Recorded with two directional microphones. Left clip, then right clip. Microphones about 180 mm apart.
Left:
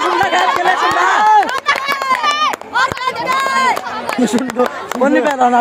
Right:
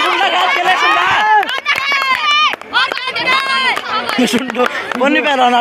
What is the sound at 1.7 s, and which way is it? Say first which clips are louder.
Run: right 2 dB; 35° left (ahead or behind).